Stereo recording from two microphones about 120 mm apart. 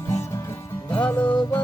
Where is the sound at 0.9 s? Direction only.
10° left (ahead or behind).